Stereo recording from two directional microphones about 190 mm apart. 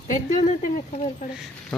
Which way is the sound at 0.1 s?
40° left (ahead or behind).